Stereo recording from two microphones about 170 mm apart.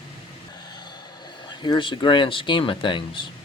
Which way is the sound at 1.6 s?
30° left (ahead or behind).